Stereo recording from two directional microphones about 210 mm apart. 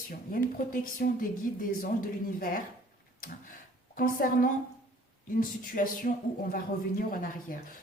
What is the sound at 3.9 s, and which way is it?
A woman's voice, 40° left (ahead or behind).